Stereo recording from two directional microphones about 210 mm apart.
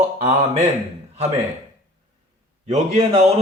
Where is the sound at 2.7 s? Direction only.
30° right (ahead or behind).